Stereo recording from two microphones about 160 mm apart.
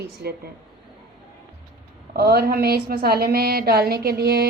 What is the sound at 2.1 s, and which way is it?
A woman's voice, 75° right (ahead or behind).